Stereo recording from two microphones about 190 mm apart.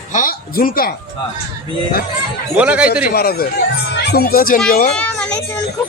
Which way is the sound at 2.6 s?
5° right (ahead or behind).